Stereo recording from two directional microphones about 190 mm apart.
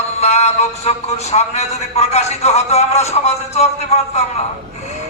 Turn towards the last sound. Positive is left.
turn(degrees=35)  # may be behind; listen again after turning